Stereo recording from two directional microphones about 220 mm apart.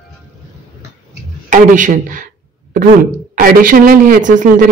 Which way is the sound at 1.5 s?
35° right (ahead or behind).